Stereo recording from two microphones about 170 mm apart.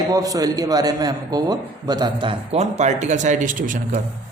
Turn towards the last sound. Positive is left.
turn(degrees=-50)  # may be behind; listen again after turning